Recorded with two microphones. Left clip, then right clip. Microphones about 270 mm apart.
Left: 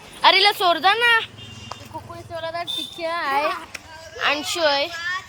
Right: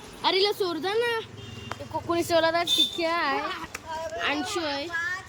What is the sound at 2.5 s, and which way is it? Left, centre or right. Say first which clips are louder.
Speech: right 4 dB; centre.